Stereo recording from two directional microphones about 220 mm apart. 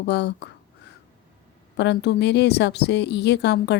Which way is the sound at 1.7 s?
50° left (ahead or behind).